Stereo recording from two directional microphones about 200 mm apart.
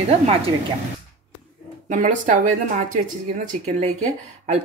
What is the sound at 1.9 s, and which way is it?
Speech, 40° right (ahead or behind).